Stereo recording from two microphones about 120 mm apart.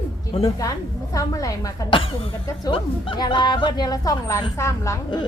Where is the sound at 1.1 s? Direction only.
30° left (ahead or behind).